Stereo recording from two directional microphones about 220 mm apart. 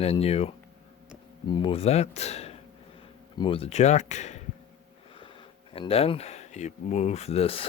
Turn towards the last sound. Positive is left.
turn(degrees=25)  # may be behind; listen again after turning